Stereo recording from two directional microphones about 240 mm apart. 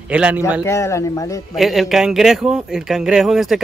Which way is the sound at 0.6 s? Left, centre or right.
Centre.